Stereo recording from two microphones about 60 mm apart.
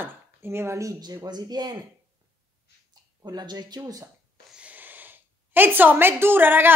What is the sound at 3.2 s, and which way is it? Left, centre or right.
Speech, right.